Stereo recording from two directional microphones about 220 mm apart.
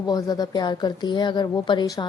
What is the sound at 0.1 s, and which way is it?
Speech, 15° left (ahead or behind).